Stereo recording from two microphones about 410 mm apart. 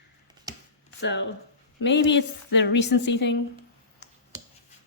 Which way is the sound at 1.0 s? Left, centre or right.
Left.